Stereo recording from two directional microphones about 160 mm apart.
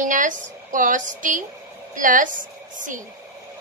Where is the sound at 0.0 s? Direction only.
55° right (ahead or behind).